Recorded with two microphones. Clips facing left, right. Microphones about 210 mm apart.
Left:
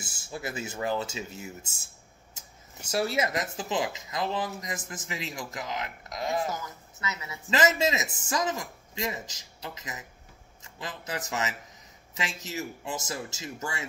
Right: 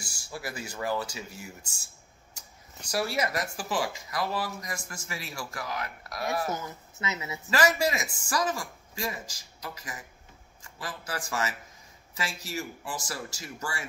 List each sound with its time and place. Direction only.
0.0 s speech: 20° left (ahead or behind)
2.9 s speech: 25° left (ahead or behind)
6.5 s a woman's voice: 25° right (ahead or behind)
7.4 s a man's voice: 20° left (ahead or behind)